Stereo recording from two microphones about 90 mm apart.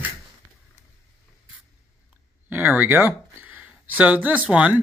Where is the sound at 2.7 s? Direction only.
15° right (ahead or behind).